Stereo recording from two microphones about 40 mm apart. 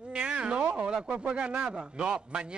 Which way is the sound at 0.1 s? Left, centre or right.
Right.